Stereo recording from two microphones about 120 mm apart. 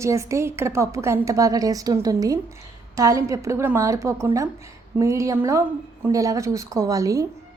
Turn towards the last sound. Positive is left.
turn(degrees=-30)  # may be behind; listen again after turning